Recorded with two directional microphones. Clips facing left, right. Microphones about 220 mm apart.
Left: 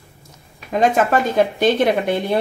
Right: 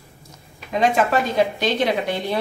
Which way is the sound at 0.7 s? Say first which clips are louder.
Left 2 dB; 50° left (ahead or behind).